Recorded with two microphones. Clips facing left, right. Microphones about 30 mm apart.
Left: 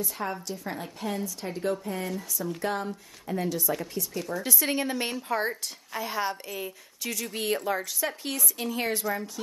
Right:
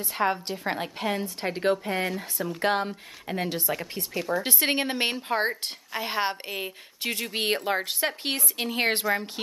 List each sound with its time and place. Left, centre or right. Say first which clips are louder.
0.0 s a woman's voice: right 6 dB; right